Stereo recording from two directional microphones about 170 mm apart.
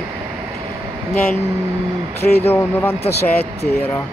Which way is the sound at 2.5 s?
10° left (ahead or behind).